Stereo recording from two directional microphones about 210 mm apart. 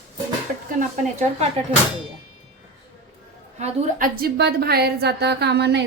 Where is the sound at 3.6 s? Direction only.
45° right (ahead or behind).